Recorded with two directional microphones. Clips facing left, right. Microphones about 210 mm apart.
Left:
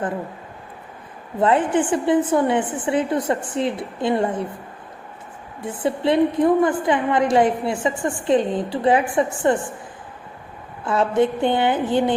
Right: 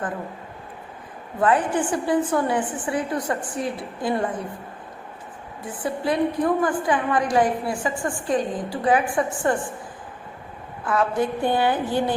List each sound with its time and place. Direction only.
1.4 s a woman's voice: 25° left (ahead or behind)
5.8 s a woman's voice: 25° left (ahead or behind)
10.8 s a woman's voice: 25° left (ahead or behind)